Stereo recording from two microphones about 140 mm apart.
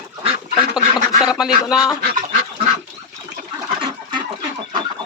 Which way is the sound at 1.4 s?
5° right (ahead or behind).